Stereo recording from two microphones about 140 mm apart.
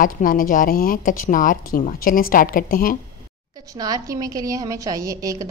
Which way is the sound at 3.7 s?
25° right (ahead or behind).